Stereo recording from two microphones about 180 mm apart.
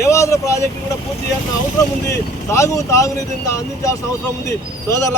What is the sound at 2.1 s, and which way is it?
Speech, 15° left (ahead or behind).